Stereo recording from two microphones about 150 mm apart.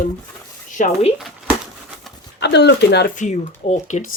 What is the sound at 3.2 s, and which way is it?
Speech, 55° left (ahead or behind).